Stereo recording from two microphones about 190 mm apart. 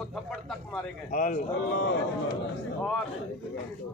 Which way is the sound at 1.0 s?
45° left (ahead or behind).